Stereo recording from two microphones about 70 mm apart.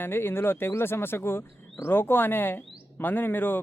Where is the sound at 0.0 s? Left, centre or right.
Left.